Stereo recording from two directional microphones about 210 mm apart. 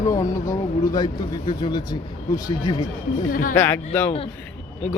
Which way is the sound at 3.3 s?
40° left (ahead or behind).